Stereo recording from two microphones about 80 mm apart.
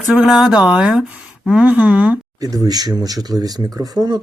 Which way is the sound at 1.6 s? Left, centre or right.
Centre.